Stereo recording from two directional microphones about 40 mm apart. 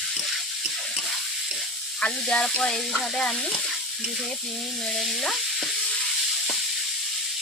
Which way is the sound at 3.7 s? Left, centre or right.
Centre.